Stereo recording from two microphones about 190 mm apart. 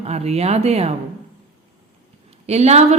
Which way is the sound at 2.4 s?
35° right (ahead or behind).